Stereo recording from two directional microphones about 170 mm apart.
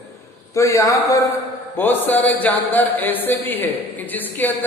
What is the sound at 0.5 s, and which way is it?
A man's voice, 20° left (ahead or behind).